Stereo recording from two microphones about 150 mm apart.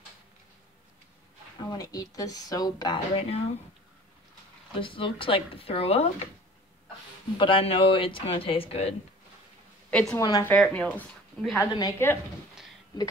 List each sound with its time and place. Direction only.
1.6 s speech: 25° left (ahead or behind)
4.7 s speech: 35° left (ahead or behind)
7.3 s speech: 35° left (ahead or behind)
9.8 s a woman's voice: 5° left (ahead or behind)
11.6 s speech: 25° left (ahead or behind)